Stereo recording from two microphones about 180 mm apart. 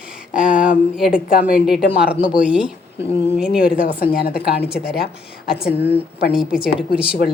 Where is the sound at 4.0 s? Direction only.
60° left (ahead or behind).